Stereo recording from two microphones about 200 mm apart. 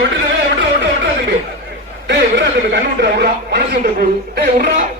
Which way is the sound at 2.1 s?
60° right (ahead or behind).